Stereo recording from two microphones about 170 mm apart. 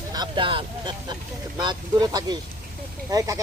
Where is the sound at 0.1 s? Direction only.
25° right (ahead or behind).